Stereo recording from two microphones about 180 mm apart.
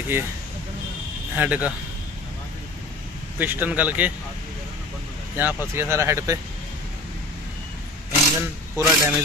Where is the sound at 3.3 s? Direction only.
10° right (ahead or behind).